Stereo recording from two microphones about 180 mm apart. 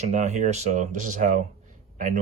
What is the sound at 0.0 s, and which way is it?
Speech, 40° right (ahead or behind).